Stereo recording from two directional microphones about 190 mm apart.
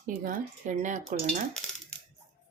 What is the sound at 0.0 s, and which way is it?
Speech, 45° right (ahead or behind).